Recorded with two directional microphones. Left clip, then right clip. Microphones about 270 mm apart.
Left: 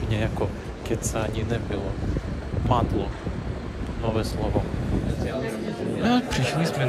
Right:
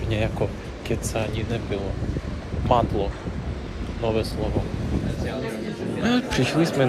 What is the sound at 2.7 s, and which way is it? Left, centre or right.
A man's voice, centre.